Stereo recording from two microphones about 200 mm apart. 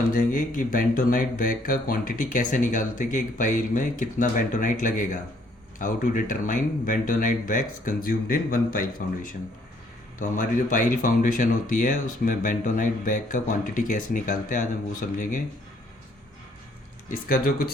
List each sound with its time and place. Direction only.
0.1 s speech: 45° left (ahead or behind)
17.1 s speech: 45° left (ahead or behind)